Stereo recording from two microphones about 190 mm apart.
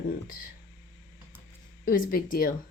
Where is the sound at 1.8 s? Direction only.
50° left (ahead or behind).